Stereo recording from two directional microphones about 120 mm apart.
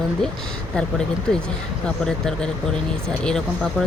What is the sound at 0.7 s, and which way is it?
Speech, 5° left (ahead or behind).